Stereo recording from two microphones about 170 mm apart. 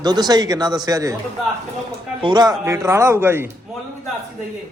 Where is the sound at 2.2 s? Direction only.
25° right (ahead or behind).